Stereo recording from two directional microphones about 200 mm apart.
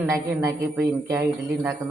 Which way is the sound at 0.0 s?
15° right (ahead or behind).